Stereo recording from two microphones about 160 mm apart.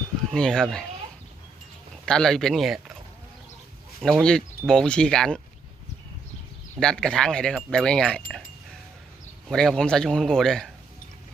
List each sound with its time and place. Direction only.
0.3 s speech: 5° left (ahead or behind)
2.0 s speech: 5° left (ahead or behind)
4.0 s speech: 5° left (ahead or behind)
6.7 s speech: 5° left (ahead or behind)
9.5 s speech: 5° left (ahead or behind)